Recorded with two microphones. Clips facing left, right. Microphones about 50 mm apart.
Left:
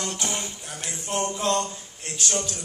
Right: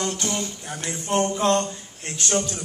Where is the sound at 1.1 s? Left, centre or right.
Right.